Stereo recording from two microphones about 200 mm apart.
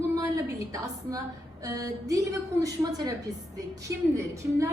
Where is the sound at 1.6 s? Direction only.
15° right (ahead or behind).